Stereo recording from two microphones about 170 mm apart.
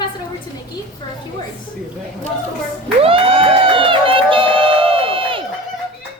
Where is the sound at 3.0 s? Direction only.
35° right (ahead or behind).